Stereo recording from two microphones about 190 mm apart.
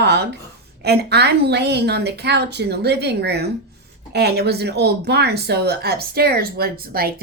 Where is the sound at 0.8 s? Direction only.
60° right (ahead or behind).